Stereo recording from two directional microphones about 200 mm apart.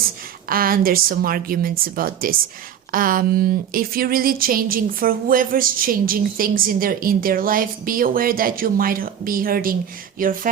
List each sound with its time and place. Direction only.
0.4 s speech: 45° right (ahead or behind)